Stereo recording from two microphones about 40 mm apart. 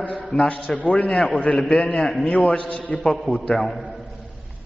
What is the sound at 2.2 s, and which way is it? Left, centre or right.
Speech, left.